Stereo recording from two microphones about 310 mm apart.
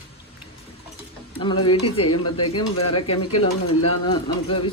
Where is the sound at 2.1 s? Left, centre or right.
Left.